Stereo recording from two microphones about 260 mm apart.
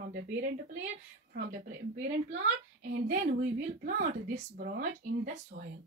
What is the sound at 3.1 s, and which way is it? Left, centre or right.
A woman's voice, right.